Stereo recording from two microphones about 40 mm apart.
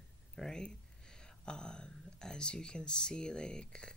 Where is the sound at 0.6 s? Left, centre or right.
Left.